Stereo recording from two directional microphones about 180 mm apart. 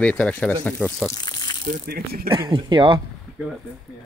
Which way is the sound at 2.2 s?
25° right (ahead or behind).